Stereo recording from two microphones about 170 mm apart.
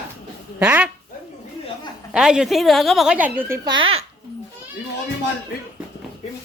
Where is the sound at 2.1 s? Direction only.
5° right (ahead or behind); by 4.0 s 30° right (ahead or behind).